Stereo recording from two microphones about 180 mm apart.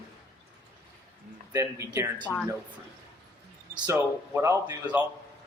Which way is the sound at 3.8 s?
10° right (ahead or behind).